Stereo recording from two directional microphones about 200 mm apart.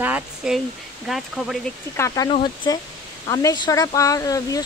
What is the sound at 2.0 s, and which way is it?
Speech, 15° left (ahead or behind).